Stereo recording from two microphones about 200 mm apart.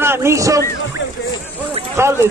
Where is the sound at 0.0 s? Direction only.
15° right (ahead or behind).